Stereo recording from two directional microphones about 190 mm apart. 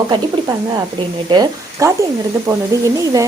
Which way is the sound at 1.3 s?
20° right (ahead or behind).